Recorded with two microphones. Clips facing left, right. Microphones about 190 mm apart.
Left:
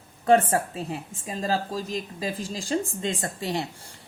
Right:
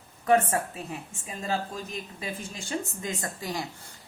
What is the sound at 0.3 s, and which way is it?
A woman's voice, 30° left (ahead or behind).